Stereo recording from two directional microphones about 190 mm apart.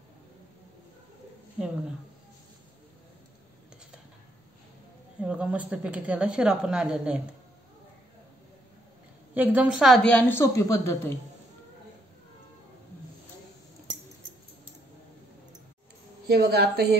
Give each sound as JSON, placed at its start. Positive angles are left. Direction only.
{"t": 5.2, "sound": "speech", "side_deg": -5}
{"t": 9.3, "sound": "a woman's voice", "side_deg": -10}
{"t": 16.3, "sound": "a woman's voice", "side_deg": -60}